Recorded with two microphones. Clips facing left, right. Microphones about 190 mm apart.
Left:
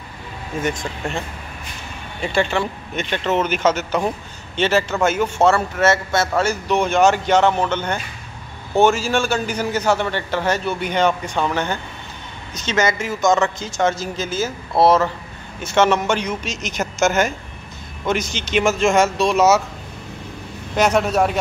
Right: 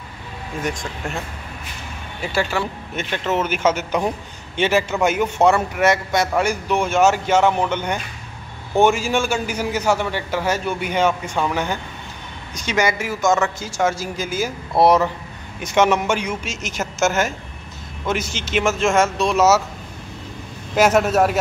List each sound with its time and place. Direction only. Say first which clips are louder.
0.6 s speech: left 3 dB; centre (ahead or behind)
2.2 s a man's voice: left 2 dB; 5° right (ahead or behind)
20.7 s speech: right 1 dB; 5° right (ahead or behind)